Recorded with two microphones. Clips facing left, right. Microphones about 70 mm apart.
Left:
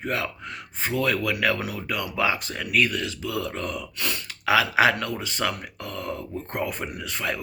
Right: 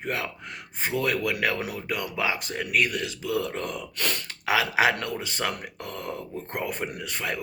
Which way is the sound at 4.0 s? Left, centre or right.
Right.